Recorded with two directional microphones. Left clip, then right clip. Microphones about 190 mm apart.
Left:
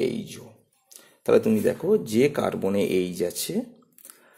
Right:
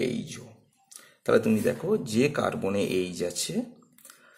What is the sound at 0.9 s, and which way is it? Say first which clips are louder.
Speech: left 3 dB; 15° left (ahead or behind).